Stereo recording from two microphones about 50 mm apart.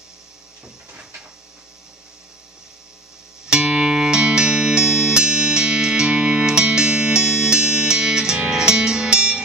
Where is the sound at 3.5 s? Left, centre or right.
Centre.